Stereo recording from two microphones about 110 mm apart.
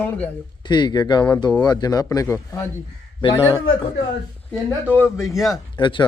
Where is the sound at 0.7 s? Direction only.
40° left (ahead or behind).